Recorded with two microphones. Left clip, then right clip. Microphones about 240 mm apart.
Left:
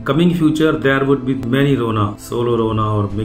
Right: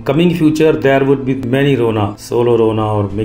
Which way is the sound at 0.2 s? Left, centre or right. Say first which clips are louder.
Right 4 dB; centre.